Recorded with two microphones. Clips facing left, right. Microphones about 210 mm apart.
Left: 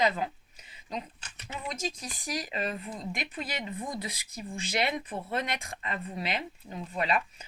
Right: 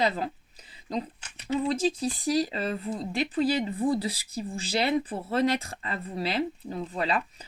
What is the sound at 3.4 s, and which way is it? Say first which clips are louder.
Speech: right 15 dB; 35° right (ahead or behind).